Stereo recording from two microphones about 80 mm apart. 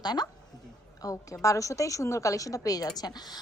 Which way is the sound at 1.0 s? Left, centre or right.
Left.